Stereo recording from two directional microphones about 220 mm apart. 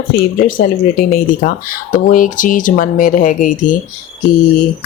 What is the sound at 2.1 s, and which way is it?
Speech, 35° left (ahead or behind).